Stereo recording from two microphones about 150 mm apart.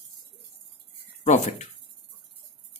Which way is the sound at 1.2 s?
50° left (ahead or behind).